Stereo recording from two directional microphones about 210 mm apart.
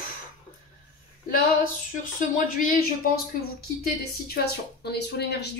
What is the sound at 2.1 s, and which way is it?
Speech, 40° left (ahead or behind).